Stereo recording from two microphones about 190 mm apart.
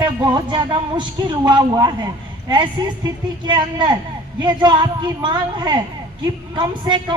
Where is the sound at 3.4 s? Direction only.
25° right (ahead or behind).